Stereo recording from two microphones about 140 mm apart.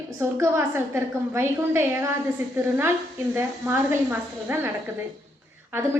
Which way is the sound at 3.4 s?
15° right (ahead or behind).